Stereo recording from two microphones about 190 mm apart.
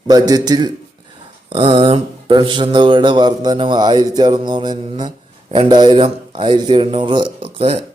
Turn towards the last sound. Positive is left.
turn(degrees=-30)  # may be behind; listen again after turning